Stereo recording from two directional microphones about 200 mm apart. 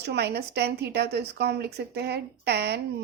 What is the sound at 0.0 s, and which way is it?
A woman's voice, 55° right (ahead or behind).